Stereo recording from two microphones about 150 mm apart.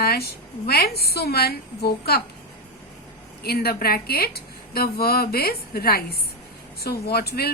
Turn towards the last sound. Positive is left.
turn(degrees=90)